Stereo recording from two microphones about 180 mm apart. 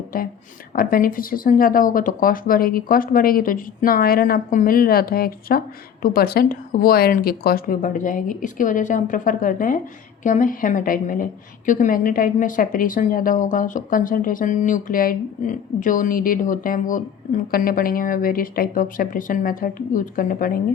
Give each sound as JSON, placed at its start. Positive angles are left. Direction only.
{"t": 0.1, "sound": "a woman's voice", "side_deg": 50}